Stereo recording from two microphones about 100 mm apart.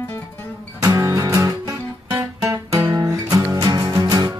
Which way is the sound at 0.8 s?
35° right (ahead or behind).